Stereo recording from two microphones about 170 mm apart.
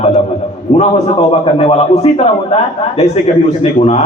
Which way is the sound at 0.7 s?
35° left (ahead or behind).